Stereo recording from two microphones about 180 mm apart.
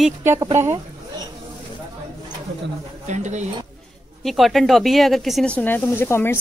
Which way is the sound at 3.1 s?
40° right (ahead or behind).